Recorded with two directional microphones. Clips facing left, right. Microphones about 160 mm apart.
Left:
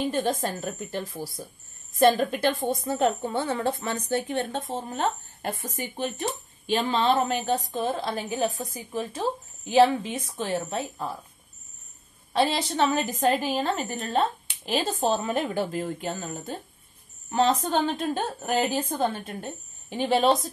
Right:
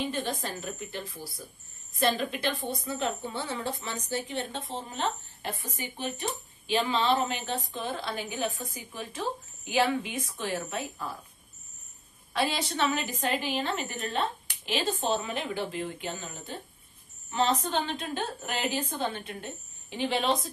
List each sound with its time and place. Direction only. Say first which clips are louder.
0.0 s a woman's voice: left 6 dB; 45° left (ahead or behind); by 11.1 s 30° left (ahead or behind)
12.7 s a woman's voice: left 5 dB; 40° left (ahead or behind)